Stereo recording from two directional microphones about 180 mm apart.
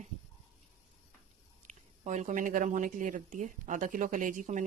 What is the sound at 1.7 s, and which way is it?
Speech, 40° right (ahead or behind).